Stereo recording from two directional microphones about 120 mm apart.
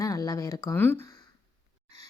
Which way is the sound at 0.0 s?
30° left (ahead or behind).